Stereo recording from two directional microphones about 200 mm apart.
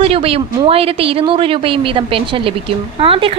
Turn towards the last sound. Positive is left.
turn(degrees=-25)  # may be behind; listen again after turning